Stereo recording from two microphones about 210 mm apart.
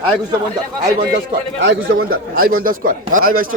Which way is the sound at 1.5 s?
50° right (ahead or behind).